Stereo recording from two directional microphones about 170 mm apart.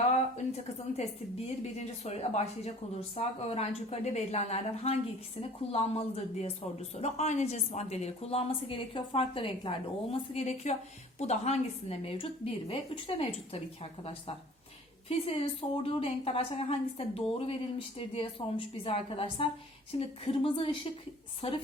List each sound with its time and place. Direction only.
1.8 s a woman's voice: 40° left (ahead or behind)